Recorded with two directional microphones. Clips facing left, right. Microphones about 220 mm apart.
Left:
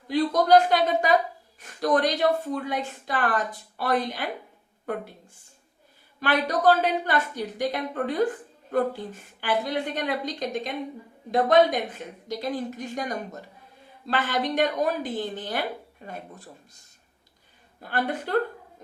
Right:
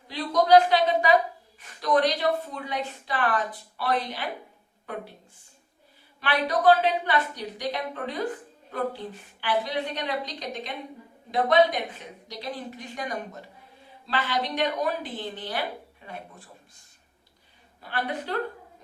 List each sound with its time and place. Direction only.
0.1 s a woman's voice: 45° left (ahead or behind)
6.1 s a woman's voice: 45° left (ahead or behind)
17.8 s a woman's voice: 45° left (ahead or behind)